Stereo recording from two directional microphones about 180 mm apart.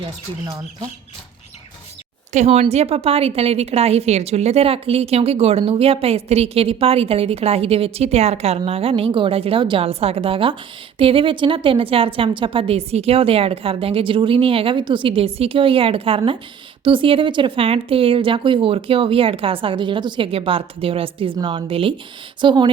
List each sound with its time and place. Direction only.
0.4 s speech: 20° right (ahead or behind)
2.3 s a woman's voice: 35° right (ahead or behind)